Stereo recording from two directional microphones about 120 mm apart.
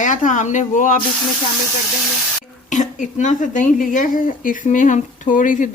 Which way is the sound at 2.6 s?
90° left.